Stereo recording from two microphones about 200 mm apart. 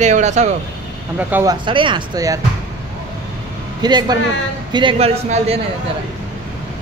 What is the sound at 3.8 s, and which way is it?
Speech, 20° right (ahead or behind).